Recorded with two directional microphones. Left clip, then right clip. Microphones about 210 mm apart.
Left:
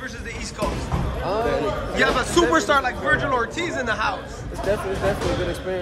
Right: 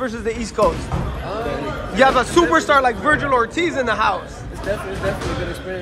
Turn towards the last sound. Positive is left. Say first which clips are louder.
# right 5 dB
turn(degrees=10)  # may be behind; listen again after turning